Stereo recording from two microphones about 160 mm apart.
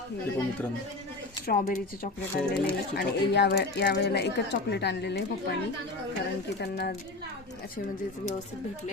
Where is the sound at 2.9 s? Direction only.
90° left.